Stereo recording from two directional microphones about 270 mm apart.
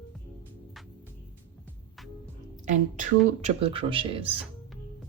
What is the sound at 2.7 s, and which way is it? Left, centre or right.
Speech, right.